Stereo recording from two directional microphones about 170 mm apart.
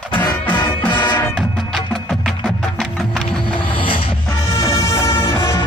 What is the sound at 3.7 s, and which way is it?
Music, 30° left (ahead or behind).